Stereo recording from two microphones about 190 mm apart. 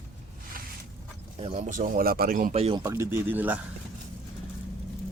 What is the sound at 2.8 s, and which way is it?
Speech, 15° right (ahead or behind).